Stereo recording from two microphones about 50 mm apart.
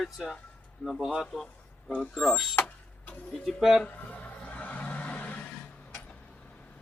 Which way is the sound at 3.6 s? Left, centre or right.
Centre.